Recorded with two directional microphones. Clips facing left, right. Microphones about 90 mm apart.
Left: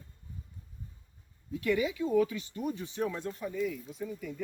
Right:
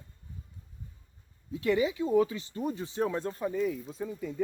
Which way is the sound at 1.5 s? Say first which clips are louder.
Right 2 dB; 25° right (ahead or behind).